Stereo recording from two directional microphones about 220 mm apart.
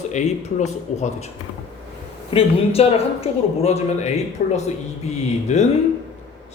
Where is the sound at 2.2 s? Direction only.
25° left (ahead or behind).